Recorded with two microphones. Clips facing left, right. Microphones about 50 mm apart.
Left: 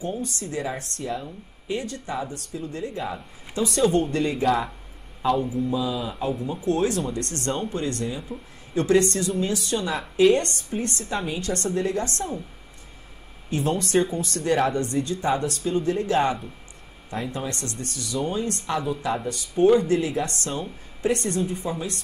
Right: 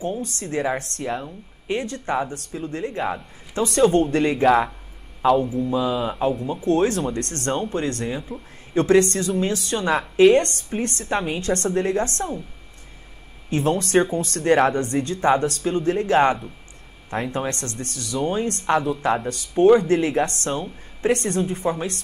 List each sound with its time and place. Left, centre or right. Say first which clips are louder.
0.2 s a woman's voice: right 4 dB; right
13.5 s a woman's voice: right 3 dB; right